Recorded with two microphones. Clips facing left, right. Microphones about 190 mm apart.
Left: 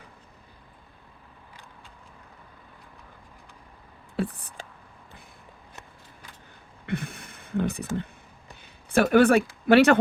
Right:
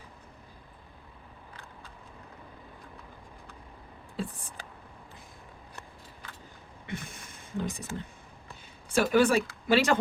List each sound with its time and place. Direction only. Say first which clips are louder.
4.2 s speech: left 7 dB; 65° left (ahead or behind)
6.8 s a sound: left 8 dB; 60° left (ahead or behind)
8.9 s speech: left 5 dB; 60° left (ahead or behind)